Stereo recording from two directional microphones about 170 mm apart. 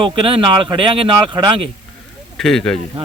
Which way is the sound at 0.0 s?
30° right (ahead or behind).